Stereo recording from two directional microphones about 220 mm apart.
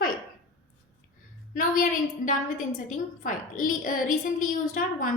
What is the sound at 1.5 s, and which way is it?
A woman's voice, 35° left (ahead or behind).